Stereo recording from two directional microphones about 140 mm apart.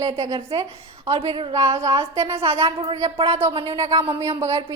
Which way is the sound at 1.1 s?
40° right (ahead or behind).